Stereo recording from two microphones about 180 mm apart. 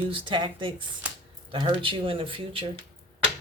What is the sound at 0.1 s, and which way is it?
Speech, 25° right (ahead or behind).